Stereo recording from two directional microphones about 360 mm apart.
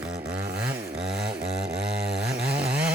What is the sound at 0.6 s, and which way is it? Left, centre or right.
Chainsaw, centre.